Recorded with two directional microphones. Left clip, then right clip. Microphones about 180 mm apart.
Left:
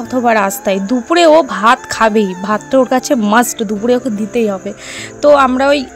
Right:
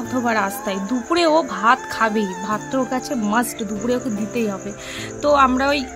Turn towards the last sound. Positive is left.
turn(degrees=35)  # may be behind; listen again after turning